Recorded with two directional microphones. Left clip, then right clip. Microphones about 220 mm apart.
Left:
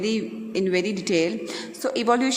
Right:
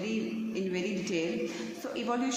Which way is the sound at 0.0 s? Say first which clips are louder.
Left 8 dB; 45° left (ahead or behind).